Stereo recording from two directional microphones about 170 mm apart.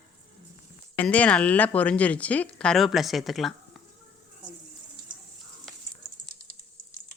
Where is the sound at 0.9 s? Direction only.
10° left (ahead or behind).